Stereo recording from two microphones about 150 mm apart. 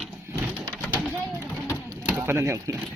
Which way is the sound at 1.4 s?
15° left (ahead or behind).